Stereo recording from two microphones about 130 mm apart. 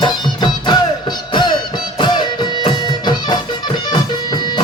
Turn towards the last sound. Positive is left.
turn(degrees=35)  # may be behind; listen again after turning